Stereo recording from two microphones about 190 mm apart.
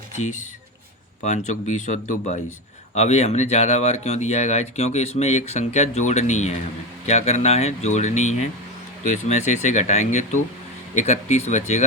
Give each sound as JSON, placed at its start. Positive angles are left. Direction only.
{"t": 0.2, "sound": "speech", "side_deg": 35}